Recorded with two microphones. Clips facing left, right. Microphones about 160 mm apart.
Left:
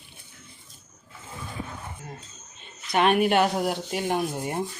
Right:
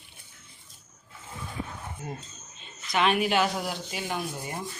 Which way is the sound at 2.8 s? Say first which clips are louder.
Left 4 dB; 50° left (ahead or behind).